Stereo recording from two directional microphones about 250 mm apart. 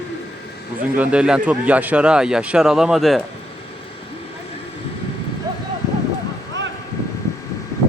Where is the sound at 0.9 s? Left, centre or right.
Centre.